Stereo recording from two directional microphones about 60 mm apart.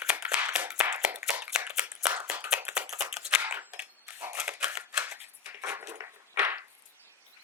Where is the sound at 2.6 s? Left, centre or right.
Centre.